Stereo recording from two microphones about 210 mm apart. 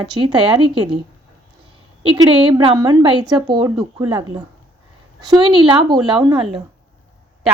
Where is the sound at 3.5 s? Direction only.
20° right (ahead or behind).